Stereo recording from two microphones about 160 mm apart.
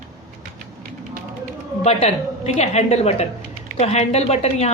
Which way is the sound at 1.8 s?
45° left (ahead or behind).